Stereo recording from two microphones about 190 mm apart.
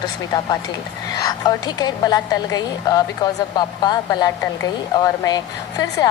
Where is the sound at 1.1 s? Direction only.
20° left (ahead or behind).